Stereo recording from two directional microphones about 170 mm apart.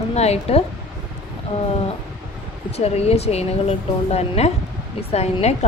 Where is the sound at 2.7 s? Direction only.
40° left (ahead or behind).